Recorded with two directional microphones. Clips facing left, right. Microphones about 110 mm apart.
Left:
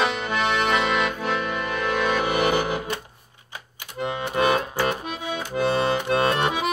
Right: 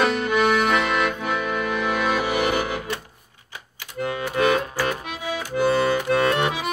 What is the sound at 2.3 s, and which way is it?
Music, 25° left (ahead or behind).